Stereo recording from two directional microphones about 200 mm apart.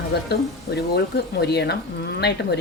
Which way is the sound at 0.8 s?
55° left (ahead or behind).